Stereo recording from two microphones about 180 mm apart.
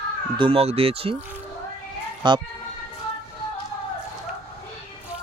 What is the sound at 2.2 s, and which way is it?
Speech, 25° right (ahead or behind).